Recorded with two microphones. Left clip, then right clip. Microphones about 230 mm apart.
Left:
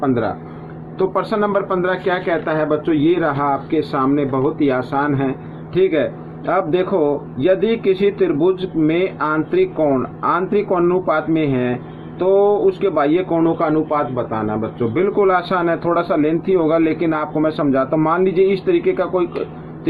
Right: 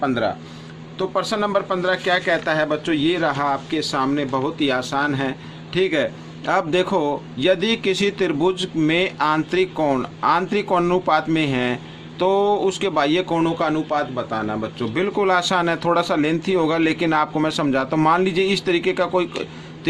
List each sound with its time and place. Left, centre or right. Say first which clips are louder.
0.0 s a man's voice: left 2 dB; right
0.9 s a man's voice: left 4 dB; right